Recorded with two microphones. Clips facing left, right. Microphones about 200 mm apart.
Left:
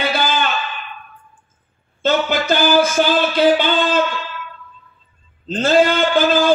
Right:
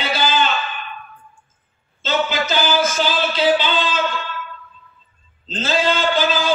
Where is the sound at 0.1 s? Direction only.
55° left (ahead or behind).